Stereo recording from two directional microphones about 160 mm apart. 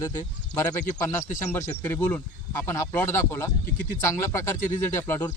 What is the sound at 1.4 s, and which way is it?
Speech, 15° left (ahead or behind).